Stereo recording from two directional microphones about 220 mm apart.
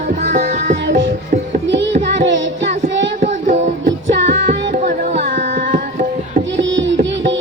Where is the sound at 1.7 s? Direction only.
55° right (ahead or behind).